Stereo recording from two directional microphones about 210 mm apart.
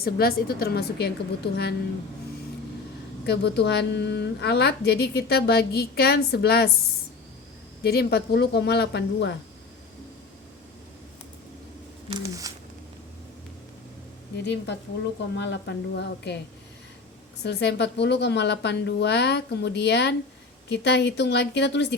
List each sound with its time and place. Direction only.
0.0 s a woman's voice: 45° left (ahead or behind)
3.2 s a woman's voice: 55° left (ahead or behind)
7.9 s a woman's voice: 50° left (ahead or behind)
12.0 s speech: 20° right (ahead or behind)
14.4 s a woman's voice: 55° left (ahead or behind)
17.4 s a woman's voice: 50° left (ahead or behind)